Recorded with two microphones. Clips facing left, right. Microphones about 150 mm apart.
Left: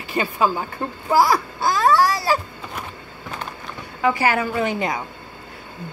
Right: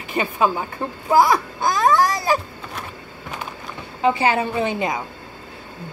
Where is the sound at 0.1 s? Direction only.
20° right (ahead or behind).